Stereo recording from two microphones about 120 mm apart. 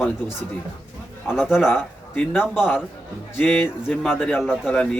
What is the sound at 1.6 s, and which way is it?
Speech, 15° left (ahead or behind).